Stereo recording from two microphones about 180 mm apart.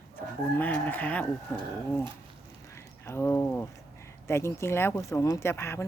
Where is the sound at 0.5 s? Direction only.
10° left (ahead or behind).